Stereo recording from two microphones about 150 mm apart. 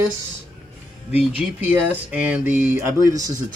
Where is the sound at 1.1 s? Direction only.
10° right (ahead or behind).